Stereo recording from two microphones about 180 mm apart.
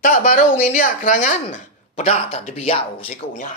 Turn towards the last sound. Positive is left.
turn(degrees=35)  # may be behind; listen again after turning